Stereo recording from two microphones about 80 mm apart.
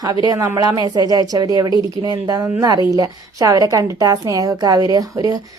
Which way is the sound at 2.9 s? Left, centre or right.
Right.